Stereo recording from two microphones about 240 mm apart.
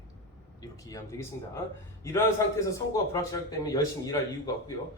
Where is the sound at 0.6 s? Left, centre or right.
Centre.